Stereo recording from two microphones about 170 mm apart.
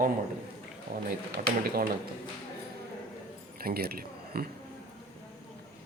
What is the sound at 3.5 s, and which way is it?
Speech, 60° right (ahead or behind).